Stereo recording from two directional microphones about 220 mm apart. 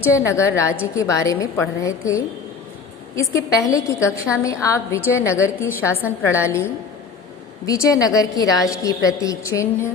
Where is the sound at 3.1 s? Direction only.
15° left (ahead or behind).